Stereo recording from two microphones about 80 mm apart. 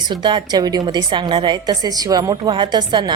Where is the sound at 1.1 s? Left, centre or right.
Right.